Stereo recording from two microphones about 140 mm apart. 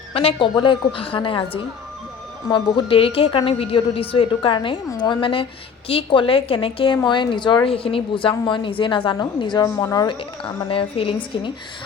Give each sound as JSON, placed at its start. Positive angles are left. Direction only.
{"t": 0.1, "sound": "a woman's voice", "side_deg": 45}
{"t": 2.5, "sound": "a woman's voice", "side_deg": 40}
{"t": 10.7, "sound": "a woman's voice", "side_deg": 40}